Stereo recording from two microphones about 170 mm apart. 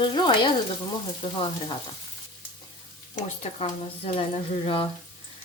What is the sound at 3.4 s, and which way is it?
Speech, 35° left (ahead or behind).